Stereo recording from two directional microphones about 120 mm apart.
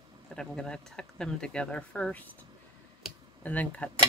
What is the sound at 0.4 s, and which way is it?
Speech, 5° left (ahead or behind).